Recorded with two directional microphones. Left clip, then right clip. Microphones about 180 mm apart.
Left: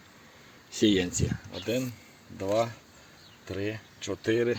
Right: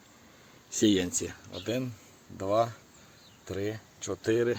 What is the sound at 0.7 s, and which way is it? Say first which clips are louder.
Speech: left 1 dB; centre (ahead or behind).